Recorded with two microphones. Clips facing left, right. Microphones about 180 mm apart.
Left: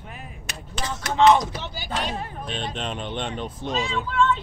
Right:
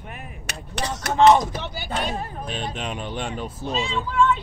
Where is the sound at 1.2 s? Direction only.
45° right (ahead or behind).